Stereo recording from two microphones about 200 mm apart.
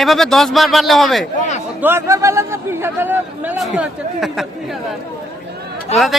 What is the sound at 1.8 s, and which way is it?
A man's voice, 10° right (ahead or behind).